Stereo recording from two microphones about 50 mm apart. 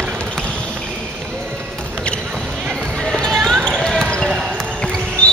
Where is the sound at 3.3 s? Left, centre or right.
Centre.